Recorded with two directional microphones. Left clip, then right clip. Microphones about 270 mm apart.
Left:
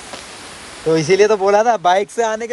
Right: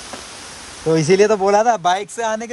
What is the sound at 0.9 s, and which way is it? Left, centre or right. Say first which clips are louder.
Speech: left 1 dB; right.